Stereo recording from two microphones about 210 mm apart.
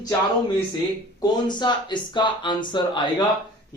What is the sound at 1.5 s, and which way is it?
Speech, 20° left (ahead or behind).